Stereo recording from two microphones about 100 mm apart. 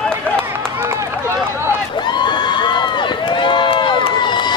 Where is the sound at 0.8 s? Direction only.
25° right (ahead or behind).